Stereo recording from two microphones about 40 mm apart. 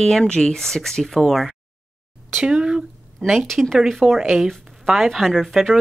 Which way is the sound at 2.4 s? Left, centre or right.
Centre.